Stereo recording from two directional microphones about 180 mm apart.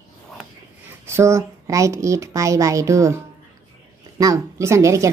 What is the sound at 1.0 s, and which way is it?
A woman's voice, 15° right (ahead or behind).